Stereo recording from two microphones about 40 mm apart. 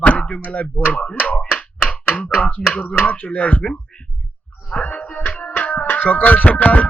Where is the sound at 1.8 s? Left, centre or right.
Left.